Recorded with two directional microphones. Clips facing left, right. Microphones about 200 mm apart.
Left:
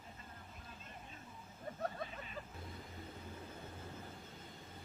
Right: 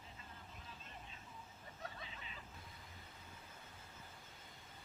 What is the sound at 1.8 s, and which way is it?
Vehicle, 50° left (ahead or behind).